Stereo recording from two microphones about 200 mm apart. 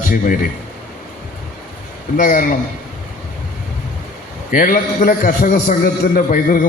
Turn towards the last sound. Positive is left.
turn(degrees=45)  # may be behind; listen again after turning